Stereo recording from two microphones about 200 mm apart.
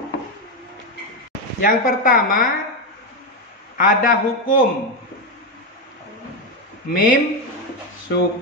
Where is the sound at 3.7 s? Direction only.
45° left (ahead or behind).